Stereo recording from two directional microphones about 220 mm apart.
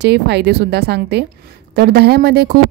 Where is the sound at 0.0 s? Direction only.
50° right (ahead or behind).